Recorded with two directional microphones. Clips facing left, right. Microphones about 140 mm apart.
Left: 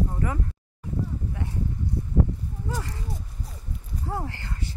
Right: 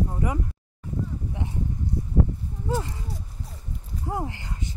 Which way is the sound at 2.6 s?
25° right (ahead or behind).